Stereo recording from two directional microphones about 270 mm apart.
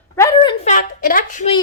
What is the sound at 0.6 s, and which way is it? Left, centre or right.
Speech, left.